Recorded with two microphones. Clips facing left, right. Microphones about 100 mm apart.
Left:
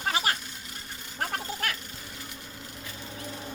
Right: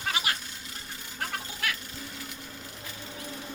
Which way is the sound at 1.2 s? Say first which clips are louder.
Left 3 dB; 40° left (ahead or behind).